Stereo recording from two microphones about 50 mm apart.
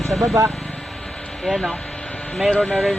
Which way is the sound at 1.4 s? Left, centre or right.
Centre.